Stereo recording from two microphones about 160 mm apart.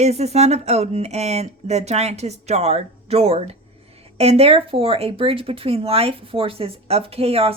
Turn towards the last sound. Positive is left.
turn(degrees=-40)  # may be behind; listen again after turning